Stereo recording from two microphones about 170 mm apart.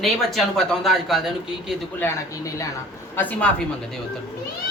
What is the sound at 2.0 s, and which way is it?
Speech, 20° left (ahead or behind).